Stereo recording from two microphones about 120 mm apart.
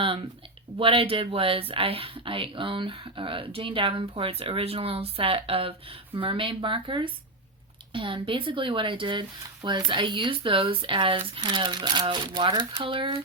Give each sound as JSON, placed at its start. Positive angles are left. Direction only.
{"t": 0.8, "sound": "speech", "side_deg": -50}